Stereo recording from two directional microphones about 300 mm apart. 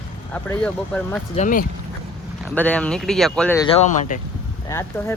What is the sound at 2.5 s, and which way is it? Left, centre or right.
Speech, centre.